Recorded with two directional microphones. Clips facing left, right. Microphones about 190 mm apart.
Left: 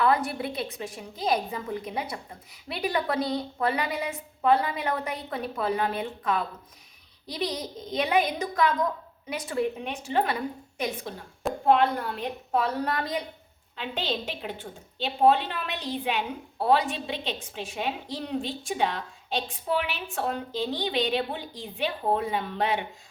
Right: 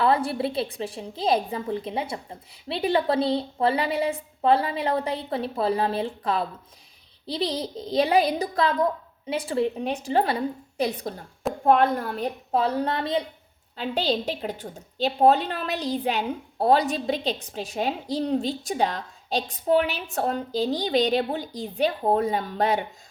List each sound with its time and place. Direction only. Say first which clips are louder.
0.0 s a woman's voice: right 2 dB; 30° right (ahead or behind)
11.6 s a woman's voice: right 2 dB; 45° right (ahead or behind); by 13.2 s 25° right (ahead or behind)
13.7 s a woman's voice: right 6 dB; 35° right (ahead or behind)